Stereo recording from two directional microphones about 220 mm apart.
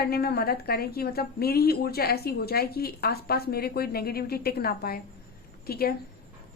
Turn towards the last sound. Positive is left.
turn(degrees=45)  # may be behind; listen again after turning